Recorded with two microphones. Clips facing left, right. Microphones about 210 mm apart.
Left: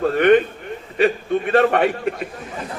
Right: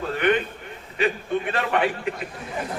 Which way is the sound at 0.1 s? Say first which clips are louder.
Left 6 dB; 45° left (ahead or behind).